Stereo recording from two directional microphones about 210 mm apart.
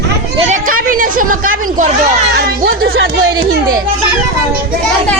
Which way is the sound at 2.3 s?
45° right (ahead or behind).